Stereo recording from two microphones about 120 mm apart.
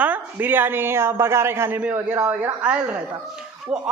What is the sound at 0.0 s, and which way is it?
A woman's voice, 15° right (ahead or behind).